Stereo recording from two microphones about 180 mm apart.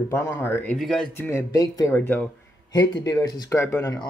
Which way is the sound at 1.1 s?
10° left (ahead or behind).